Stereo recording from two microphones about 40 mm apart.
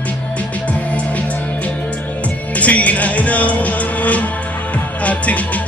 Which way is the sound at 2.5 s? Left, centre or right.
Left.